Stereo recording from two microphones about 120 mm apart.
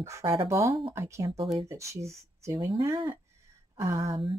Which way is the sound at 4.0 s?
45° right (ahead or behind).